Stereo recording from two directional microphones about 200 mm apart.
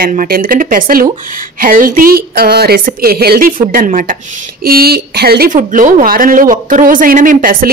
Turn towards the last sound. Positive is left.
turn(degrees=-45)  # may be behind; listen again after turning